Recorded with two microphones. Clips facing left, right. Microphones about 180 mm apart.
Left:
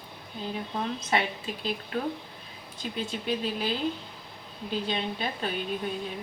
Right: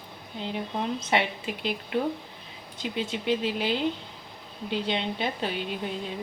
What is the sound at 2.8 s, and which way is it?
Speech, 20° right (ahead or behind).